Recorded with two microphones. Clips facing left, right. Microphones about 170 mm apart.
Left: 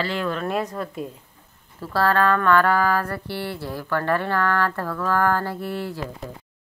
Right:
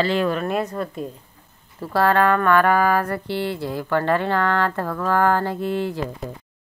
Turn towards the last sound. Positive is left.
turn(degrees=-20)  # may be behind; listen again after turning